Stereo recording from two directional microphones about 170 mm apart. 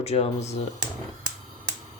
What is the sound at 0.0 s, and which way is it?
Speech, 40° left (ahead or behind).